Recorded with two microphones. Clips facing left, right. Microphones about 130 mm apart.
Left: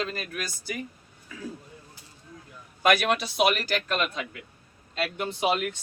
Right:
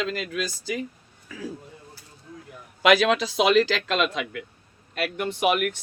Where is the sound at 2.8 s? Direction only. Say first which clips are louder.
Right 4 dB; 90° right.